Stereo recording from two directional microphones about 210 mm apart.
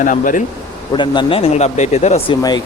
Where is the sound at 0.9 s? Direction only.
20° left (ahead or behind).